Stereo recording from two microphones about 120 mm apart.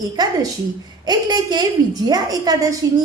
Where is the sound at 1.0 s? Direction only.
35° right (ahead or behind).